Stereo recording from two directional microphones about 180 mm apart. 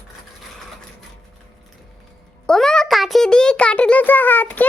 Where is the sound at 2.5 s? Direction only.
5° left (ahead or behind).